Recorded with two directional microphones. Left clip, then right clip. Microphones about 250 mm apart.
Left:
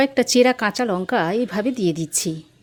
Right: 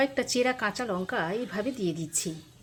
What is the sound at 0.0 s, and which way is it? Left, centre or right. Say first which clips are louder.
A woman's voice: left 10 dB; left.